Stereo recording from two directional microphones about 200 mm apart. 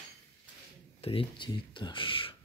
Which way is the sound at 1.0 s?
25° left (ahead or behind).